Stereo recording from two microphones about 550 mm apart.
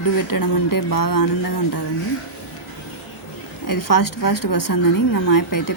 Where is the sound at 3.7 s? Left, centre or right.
Left.